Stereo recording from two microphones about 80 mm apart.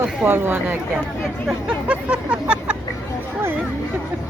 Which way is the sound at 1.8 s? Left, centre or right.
Centre.